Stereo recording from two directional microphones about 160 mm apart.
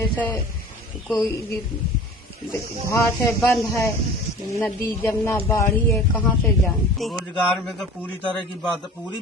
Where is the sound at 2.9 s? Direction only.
15° left (ahead or behind).